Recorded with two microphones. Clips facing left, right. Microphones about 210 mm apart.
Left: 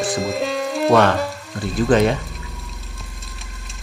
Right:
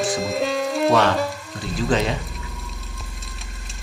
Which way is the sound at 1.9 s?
55° left (ahead or behind).